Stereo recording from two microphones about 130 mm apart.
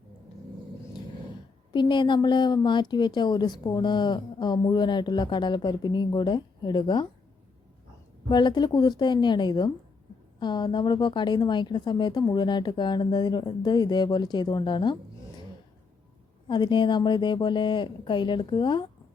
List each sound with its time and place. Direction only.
1.7 s a woman's voice: 35° left (ahead or behind)
8.3 s a woman's voice: 35° left (ahead or behind)
16.5 s a woman's voice: 35° left (ahead or behind)